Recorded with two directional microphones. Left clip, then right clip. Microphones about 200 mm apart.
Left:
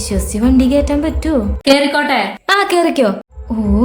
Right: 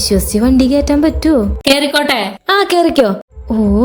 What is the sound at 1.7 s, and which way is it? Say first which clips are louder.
A woman's voice: even; 40° right (ahead or behind).